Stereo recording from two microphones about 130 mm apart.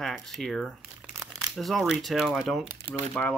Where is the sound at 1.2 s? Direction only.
30° right (ahead or behind).